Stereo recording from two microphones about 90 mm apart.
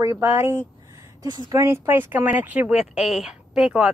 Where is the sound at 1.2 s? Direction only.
55° right (ahead or behind).